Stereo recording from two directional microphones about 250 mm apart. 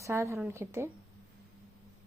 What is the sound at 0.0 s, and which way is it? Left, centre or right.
Speech, centre.